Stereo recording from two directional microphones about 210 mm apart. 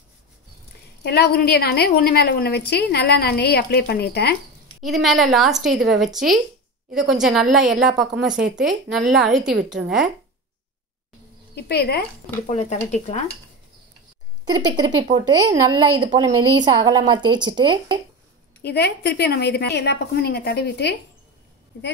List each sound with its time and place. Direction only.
1.0 s a woman's voice: 50° left (ahead or behind)
4.8 s a woman's voice: centre (ahead or behind)
11.5 s a woman's voice: 50° left (ahead or behind)
12.4 s speech: 35° left (ahead or behind)
14.4 s a woman's voice: 20° right (ahead or behind)
18.6 s a woman's voice: 50° left (ahead or behind)